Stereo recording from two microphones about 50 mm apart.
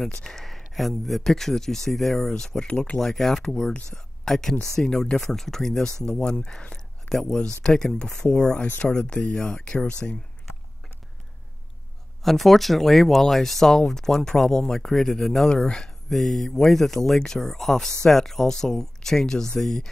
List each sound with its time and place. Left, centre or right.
0.2 s speech: centre
2.6 s speech: left
6.0 s speech: left
7.1 s speech: centre; by 9.9 s left
12.2 s speech: centre
16.1 s speech: centre